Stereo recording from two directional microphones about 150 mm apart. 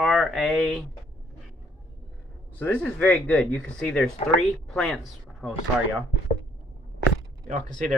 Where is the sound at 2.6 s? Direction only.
10° left (ahead or behind).